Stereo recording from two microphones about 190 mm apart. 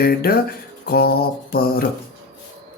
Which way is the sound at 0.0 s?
55° left (ahead or behind).